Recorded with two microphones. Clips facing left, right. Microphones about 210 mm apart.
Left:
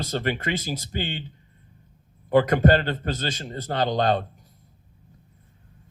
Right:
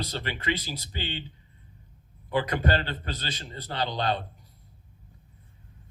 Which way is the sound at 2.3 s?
45° left (ahead or behind).